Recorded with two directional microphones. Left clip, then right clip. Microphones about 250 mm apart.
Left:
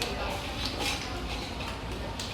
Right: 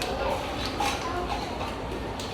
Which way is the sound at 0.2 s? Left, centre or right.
Centre.